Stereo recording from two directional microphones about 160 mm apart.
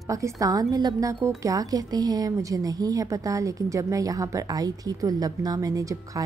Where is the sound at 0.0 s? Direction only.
20° right (ahead or behind).